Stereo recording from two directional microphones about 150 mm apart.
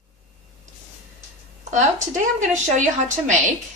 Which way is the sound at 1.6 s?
55° right (ahead or behind).